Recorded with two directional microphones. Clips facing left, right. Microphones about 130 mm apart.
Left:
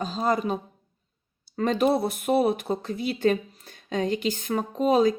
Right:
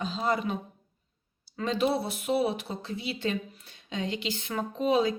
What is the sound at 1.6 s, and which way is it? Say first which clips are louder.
Speech: left 5 dB; 50° left (ahead or behind).